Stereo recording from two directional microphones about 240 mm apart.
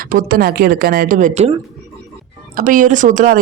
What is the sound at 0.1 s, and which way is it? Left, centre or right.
A man's voice, right.